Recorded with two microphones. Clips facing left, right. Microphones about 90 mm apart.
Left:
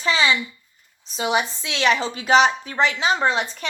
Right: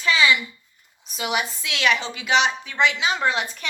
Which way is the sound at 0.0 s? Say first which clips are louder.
Even; 35° left (ahead or behind).